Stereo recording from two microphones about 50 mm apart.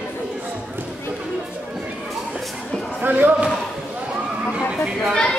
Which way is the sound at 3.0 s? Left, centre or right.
Right.